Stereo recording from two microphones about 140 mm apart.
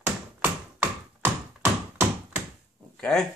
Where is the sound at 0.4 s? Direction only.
15° right (ahead or behind).